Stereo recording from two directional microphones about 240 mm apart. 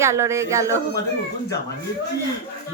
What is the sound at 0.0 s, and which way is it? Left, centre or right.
Speech, centre.